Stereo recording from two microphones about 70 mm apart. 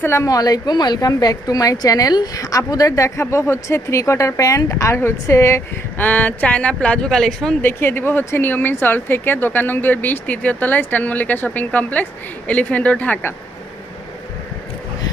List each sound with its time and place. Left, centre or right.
0.0 s a woman's voice: left
0.3 s a woman's voice: left
4.7 s a woman's voice: left
6.0 s speech: left; by 7.5 s centre
7.6 s speech: left